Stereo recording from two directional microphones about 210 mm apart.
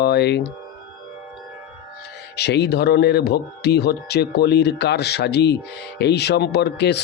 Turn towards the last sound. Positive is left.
turn(degrees=55)  # may be behind; listen again after turning